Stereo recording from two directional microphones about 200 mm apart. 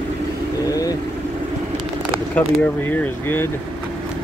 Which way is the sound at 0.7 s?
20° left (ahead or behind).